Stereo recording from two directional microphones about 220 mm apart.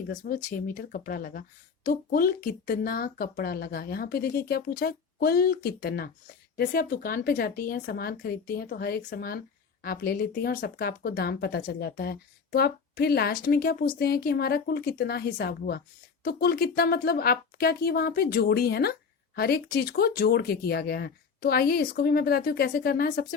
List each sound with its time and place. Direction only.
0.1 s speech: 35° left (ahead or behind)